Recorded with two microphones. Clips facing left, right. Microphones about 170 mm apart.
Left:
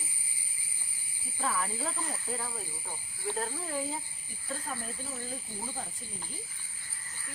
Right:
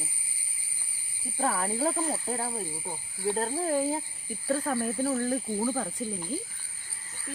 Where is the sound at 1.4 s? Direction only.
40° right (ahead or behind).